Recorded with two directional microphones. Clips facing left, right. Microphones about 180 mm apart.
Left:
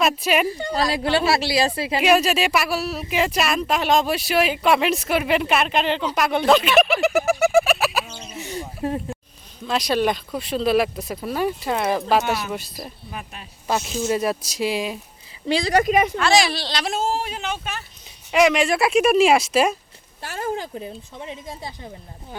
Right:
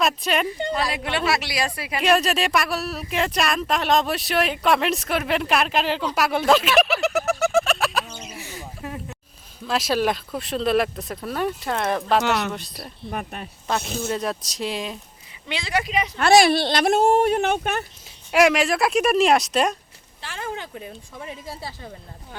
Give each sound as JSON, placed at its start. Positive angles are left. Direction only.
{"t": 0.0, "sound": "speech", "side_deg": 5}
{"t": 0.7, "sound": "speech", "side_deg": 35}
{"t": 2.0, "sound": "speech", "side_deg": 0}
{"t": 7.4, "sound": "bird", "side_deg": 5}
{"t": 8.5, "sound": "a sound", "side_deg": 35}
{"t": 9.6, "sound": "speech", "side_deg": 0}
{"t": 12.2, "sound": "speech", "side_deg": -65}
{"t": 13.1, "sound": "speech", "side_deg": -50}
{"t": 14.1, "sound": "speech", "side_deg": 5}
{"t": 15.4, "sound": "speech", "side_deg": 35}
{"t": 16.2, "sound": "speech", "side_deg": -55}
{"t": 18.3, "sound": "speech", "side_deg": -5}
{"t": 20.2, "sound": "speech", "side_deg": 45}